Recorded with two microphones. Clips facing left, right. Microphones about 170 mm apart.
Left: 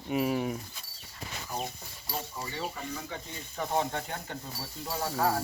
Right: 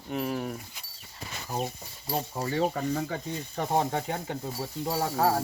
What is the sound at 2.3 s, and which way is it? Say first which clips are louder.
Speech: right 9 dB; 55° right (ahead or behind).